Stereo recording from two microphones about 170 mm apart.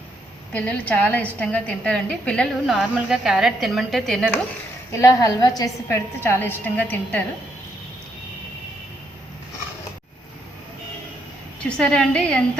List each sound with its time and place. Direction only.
0.5 s a woman's voice: 10° left (ahead or behind)
4.9 s a woman's voice: 20° left (ahead or behind)
11.8 s a woman's voice: 5° left (ahead or behind)